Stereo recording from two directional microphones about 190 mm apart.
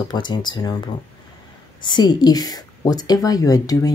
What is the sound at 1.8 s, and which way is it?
Speech, 25° left (ahead or behind).